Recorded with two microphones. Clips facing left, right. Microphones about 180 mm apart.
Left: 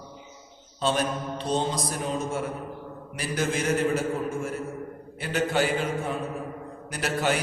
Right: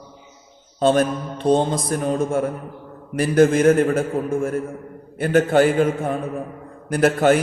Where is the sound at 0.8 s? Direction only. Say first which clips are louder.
Right 9 dB; 50° right (ahead or behind).